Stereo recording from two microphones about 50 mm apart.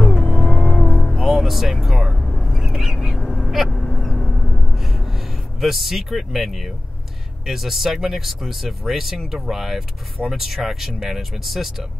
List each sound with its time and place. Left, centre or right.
0.0 s vehicle: centre
0.7 s music: centre
1.1 s vehicle: centre
2.6 s bird: centre
3.2 s a sound: centre
3.7 s duck: centre
4.2 s a sound: centre
4.7 s a sound: centre
7.4 s speech: centre